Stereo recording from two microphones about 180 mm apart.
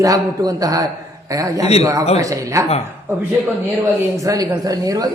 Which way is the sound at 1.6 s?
35° left (ahead or behind).